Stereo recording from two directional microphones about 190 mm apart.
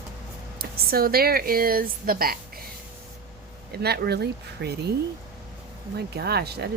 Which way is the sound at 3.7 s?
55° right (ahead or behind).